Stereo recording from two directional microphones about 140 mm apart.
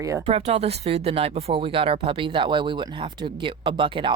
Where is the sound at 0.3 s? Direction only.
45° right (ahead or behind).